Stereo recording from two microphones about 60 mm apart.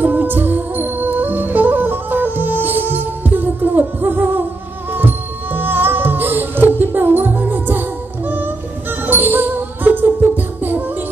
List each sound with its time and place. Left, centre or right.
0.0 s music: right
9.0 s music: right